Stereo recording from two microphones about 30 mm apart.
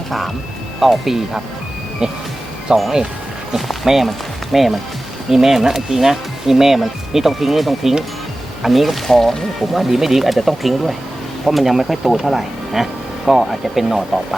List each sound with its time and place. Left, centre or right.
0.8 s speech: centre
2.0 s speech: right
3.9 s speech: centre
9.6 s speech: centre
10.2 s speech: centre